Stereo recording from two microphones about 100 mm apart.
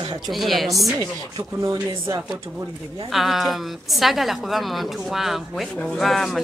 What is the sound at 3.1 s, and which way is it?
A woman's voice, centre (ahead or behind).